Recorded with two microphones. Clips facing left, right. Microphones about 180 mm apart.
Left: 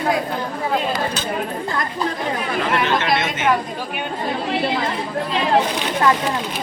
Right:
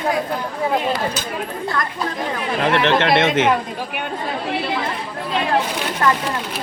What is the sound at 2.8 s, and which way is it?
Speech, 65° right (ahead or behind).